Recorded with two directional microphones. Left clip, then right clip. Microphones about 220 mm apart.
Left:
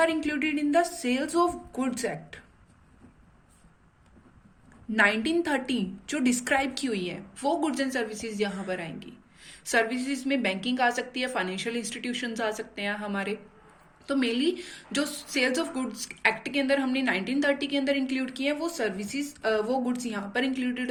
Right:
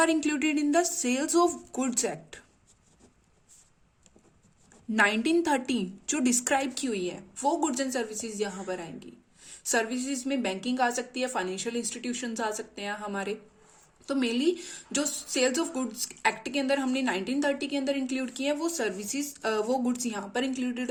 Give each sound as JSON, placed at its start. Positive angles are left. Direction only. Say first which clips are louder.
{"t": 0.0, "sound": "a woman's voice", "louder": "even", "side_deg": -45}
{"t": 4.9, "sound": "a woman's voice", "louder": "left 1 dB", "side_deg": -40}